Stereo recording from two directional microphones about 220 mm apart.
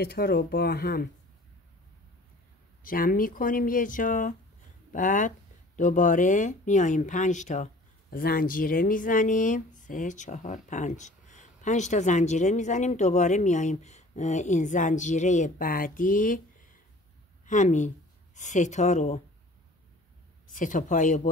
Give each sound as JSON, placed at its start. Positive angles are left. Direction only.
{"t": 0.0, "sound": "speech", "side_deg": 45}
{"t": 2.8, "sound": "speech", "side_deg": 40}
{"t": 17.5, "sound": "speech", "side_deg": 35}
{"t": 20.4, "sound": "speech", "side_deg": 35}